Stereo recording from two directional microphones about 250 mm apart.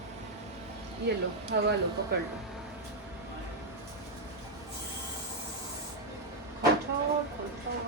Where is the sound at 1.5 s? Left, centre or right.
Right.